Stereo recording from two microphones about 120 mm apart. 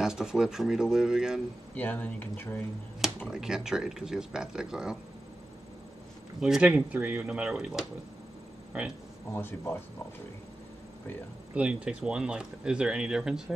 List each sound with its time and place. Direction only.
0.0 s speech: 5° right (ahead or behind)
1.8 s speech: 15° left (ahead or behind)
3.3 s speech: 5° right (ahead or behind)
6.4 s speech: 10° right (ahead or behind)
9.3 s speech: 20° left (ahead or behind)
11.5 s speech: 10° right (ahead or behind)